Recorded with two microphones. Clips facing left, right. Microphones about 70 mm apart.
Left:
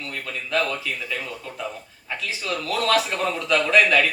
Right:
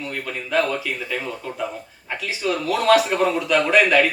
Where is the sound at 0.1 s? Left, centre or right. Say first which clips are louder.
Right 2 dB; right.